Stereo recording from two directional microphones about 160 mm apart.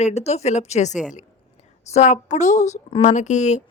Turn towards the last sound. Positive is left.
turn(degrees=45)  # may be behind; listen again after turning